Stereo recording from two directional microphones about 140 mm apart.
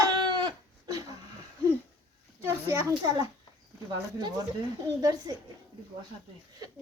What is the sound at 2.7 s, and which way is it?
Speech, 25° right (ahead or behind).